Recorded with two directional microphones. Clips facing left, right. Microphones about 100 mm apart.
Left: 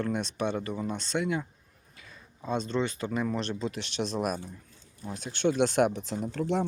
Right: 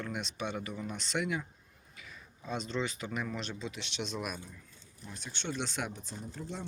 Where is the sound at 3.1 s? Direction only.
35° left (ahead or behind).